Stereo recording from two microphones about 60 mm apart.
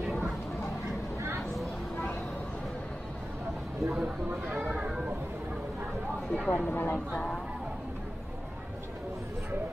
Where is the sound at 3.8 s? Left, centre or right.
Centre.